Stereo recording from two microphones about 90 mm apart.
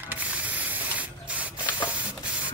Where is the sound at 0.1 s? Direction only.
15° right (ahead or behind).